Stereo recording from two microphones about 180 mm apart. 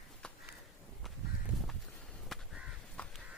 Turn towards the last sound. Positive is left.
turn(degrees=0)  # may be behind; listen again after turning